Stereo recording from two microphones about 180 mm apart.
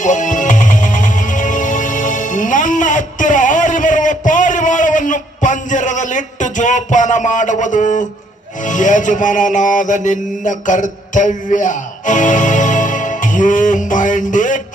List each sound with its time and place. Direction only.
0.0 s music: 45° left (ahead or behind)
8.6 s mantra: 45° left (ahead or behind)
11.1 s music: 45° left (ahead or behind)